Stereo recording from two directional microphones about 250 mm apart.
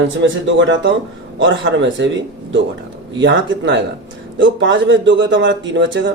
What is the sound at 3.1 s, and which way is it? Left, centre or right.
Speech, right.